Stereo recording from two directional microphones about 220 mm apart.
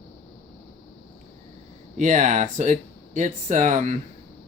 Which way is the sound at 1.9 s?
35° right (ahead or behind).